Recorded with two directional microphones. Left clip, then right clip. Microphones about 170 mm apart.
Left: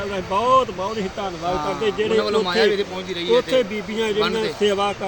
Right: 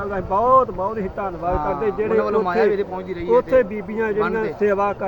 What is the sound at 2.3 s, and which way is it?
Speech, 30° left (ahead or behind).